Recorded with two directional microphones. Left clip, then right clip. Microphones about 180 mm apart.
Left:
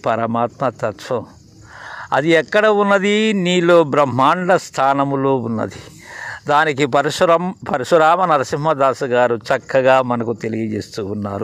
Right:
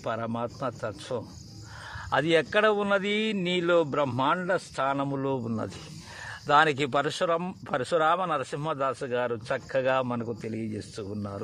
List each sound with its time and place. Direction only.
0.0 s speech: 40° left (ahead or behind)